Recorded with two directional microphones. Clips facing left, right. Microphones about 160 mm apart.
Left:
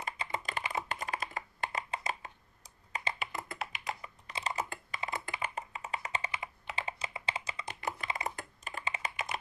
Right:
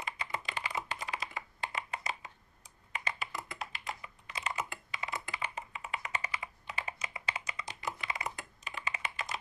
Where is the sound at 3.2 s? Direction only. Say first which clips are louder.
Left 2 dB; 60° left (ahead or behind).